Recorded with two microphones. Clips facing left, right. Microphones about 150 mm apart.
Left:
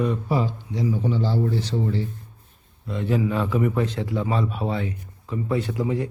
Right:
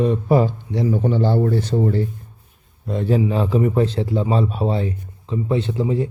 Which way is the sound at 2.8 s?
35° right (ahead or behind).